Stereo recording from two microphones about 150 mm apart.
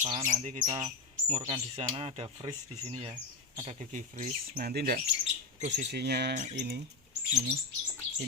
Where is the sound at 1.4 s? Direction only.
40° right (ahead or behind).